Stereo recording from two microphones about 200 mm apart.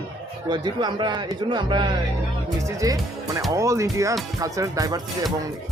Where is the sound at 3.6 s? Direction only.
15° right (ahead or behind).